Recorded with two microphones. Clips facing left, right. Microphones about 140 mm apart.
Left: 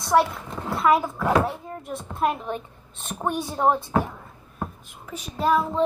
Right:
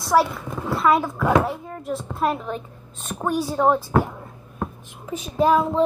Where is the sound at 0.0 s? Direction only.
Centre (ahead or behind).